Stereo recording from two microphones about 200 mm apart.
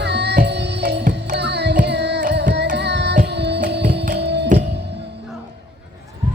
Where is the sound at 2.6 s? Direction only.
55° right (ahead or behind).